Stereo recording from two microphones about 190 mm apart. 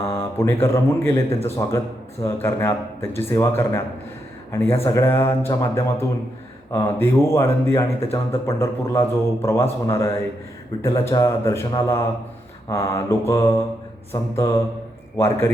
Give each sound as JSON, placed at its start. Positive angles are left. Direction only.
{"t": 0.0, "sound": "a man's voice", "side_deg": 10}